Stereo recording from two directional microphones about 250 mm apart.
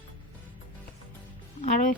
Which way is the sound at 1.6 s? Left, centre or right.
Left.